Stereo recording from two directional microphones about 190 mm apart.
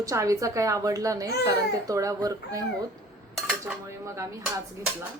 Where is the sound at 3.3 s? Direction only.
5° right (ahead or behind).